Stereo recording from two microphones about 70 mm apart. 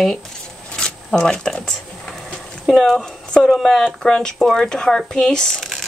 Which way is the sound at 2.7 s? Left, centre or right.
Centre.